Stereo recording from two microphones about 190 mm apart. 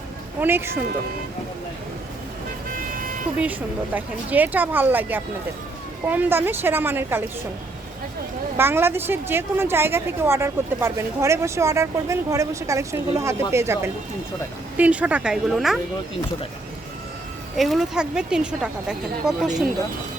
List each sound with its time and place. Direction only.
0.3 s speech: 10° right (ahead or behind)
2.7 s vehicle: 50° right (ahead or behind)
3.9 s a woman's voice: 10° right (ahead or behind)
8.5 s a woman's voice: 10° right (ahead or behind)
17.6 s speech: centre (ahead or behind)